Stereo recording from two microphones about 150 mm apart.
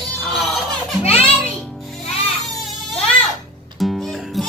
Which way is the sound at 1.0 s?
40° left (ahead or behind).